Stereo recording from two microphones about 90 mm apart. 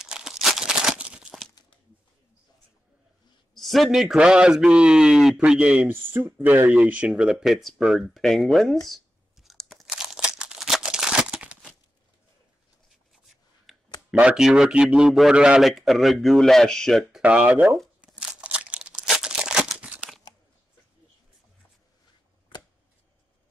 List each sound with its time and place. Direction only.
0.0 s tearing: 5° right (ahead or behind)
1.6 s a sound: 45° left (ahead or behind)
3.5 s a man's voice: centre (ahead or behind); by 7.1 s 15° right (ahead or behind)
7.1 s a man's voice: 5° right (ahead or behind)
8.8 s a sound: centre (ahead or behind)
9.8 s crumpling: 5° right (ahead or behind)
14.3 s a man's voice: 5° right (ahead or behind)
17.2 s a man's voice: 15° right (ahead or behind)
18.1 s crumpling: 15° right (ahead or behind)